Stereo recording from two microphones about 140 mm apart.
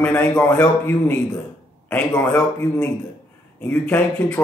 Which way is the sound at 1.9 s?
10° left (ahead or behind).